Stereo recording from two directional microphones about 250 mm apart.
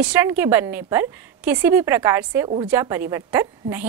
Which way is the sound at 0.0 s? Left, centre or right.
Centre.